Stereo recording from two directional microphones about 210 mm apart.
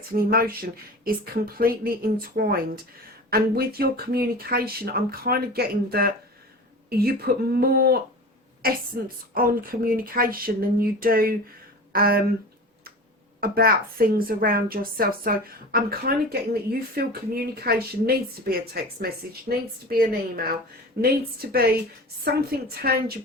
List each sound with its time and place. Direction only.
0.1 s speech: 45° right (ahead or behind)
13.4 s speech: 45° right (ahead or behind)
22.3 s speech: 50° right (ahead or behind)